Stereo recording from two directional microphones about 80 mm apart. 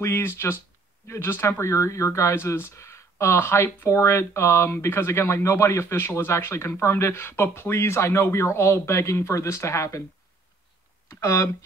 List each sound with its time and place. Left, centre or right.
0.0 s speech: left
11.1 s speech: left